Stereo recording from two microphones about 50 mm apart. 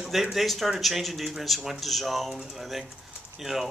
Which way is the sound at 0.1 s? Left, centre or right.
Centre.